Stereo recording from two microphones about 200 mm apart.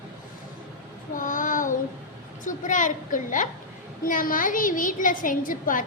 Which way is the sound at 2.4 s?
40° left (ahead or behind).